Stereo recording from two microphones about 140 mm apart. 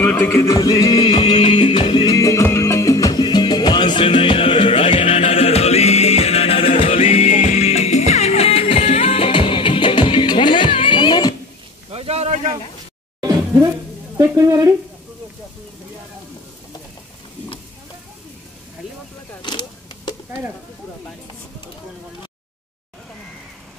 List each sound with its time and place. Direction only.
0.0 s music: 15° left (ahead or behind); by 2.1 s 35° left (ahead or behind)
2.1 s music: 20° left (ahead or behind); by 7.2 s 45° left (ahead or behind)
7.2 s music: 65° left (ahead or behind)
7.6 s music: 50° left (ahead or behind); by 11.3 s 30° left (ahead or behind)
11.9 s a sound: 45° right (ahead or behind)
13.2 s a sound: 25° right (ahead or behind)
14.1 s stir: 20° right (ahead or behind)